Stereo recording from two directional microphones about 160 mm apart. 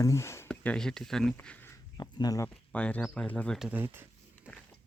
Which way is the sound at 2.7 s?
5° left (ahead or behind).